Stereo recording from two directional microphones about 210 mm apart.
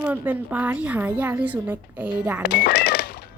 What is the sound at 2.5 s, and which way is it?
Cash register, 45° left (ahead or behind).